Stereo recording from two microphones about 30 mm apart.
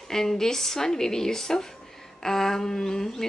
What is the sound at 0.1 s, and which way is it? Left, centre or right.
Speech, centre.